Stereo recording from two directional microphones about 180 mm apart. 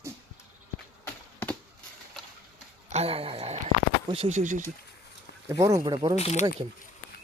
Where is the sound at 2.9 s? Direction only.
35° right (ahead or behind).